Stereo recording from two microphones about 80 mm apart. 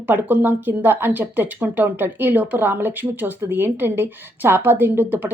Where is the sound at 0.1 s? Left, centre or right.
Right.